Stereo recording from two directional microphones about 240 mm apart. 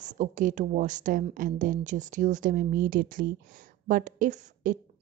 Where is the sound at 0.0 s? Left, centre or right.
Right.